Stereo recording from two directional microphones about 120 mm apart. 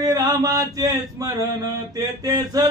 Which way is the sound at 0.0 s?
30° right (ahead or behind).